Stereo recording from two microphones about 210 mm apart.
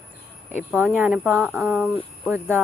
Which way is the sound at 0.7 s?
10° right (ahead or behind).